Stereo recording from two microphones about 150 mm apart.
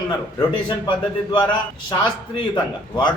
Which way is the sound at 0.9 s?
35° left (ahead or behind).